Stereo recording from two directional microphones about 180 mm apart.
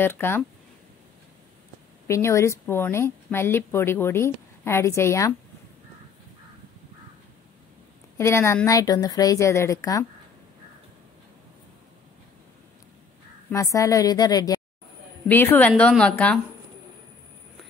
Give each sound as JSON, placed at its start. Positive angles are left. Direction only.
{"t": 0.0, "sound": "a woman's voice", "side_deg": 10}
{"t": 2.0, "sound": "a woman's voice", "side_deg": 15}
{"t": 8.2, "sound": "speech", "side_deg": 15}
{"t": 13.5, "sound": "speech", "side_deg": 15}
{"t": 15.2, "sound": "a woman's voice", "side_deg": 10}